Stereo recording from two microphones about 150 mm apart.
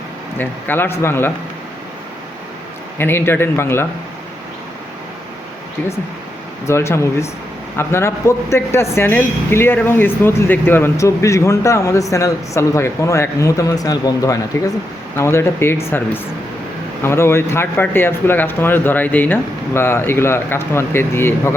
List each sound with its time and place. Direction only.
0.3 s speech: 15° left (ahead or behind)
3.0 s speech: 15° left (ahead or behind)
6.7 s speech: 20° left (ahead or behind)